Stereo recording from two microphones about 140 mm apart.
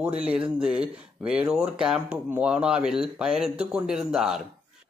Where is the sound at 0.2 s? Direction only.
10° right (ahead or behind).